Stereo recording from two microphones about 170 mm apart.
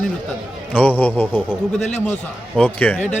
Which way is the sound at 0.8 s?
10° left (ahead or behind).